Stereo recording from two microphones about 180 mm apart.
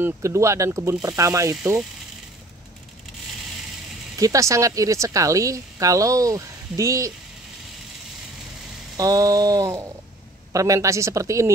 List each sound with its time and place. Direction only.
0.0 s speech: 15° right (ahead or behind)
4.2 s speech: 20° right (ahead or behind)
8.9 s speech: 20° right (ahead or behind)